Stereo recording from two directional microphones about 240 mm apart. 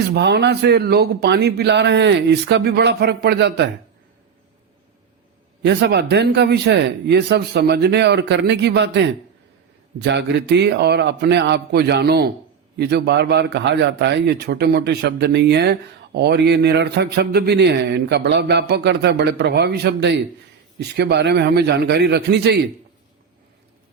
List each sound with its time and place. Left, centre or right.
0.1 s a man's voice: right
5.6 s a man's voice: right